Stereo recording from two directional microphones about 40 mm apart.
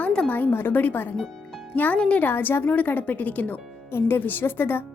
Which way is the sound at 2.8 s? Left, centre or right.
Left.